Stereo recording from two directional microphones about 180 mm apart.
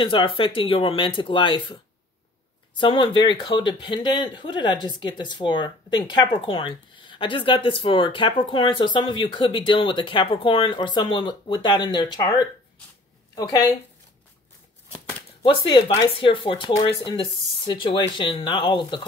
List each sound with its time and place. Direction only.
0.0 s a woman's voice: 30° left (ahead or behind)
15.4 s speech: 25° left (ahead or behind)